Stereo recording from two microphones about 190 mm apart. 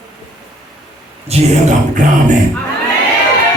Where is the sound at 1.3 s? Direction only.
35° right (ahead or behind).